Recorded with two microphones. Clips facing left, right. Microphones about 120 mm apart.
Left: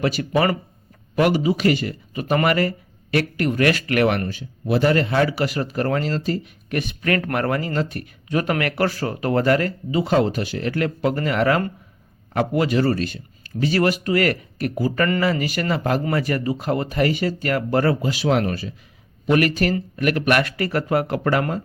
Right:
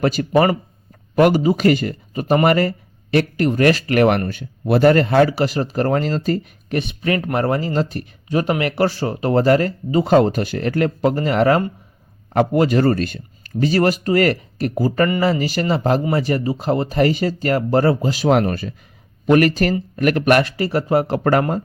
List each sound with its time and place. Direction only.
0.0 s a man's voice: 40° right (ahead or behind)
4.3 s speech: 60° right (ahead or behind)
6.7 s a man's voice: 25° right (ahead or behind); by 18.7 s 55° right (ahead or behind)
19.3 s a man's voice: 40° right (ahead or behind)
20.4 s speech: 25° right (ahead or behind)